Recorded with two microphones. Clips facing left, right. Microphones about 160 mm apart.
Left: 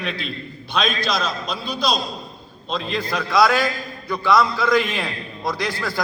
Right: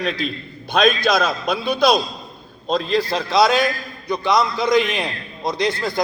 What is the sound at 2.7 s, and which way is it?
A man's voice, 40° right (ahead or behind).